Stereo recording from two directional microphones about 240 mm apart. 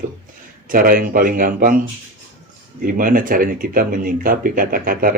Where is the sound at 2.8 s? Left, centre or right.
Right.